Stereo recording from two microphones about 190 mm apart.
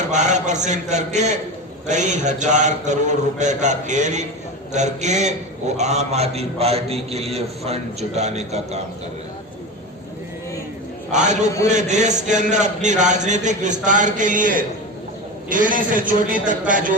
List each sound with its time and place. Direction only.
0.1 s a man's voice: 40° right (ahead or behind)
11.1 s a man's voice: 40° right (ahead or behind)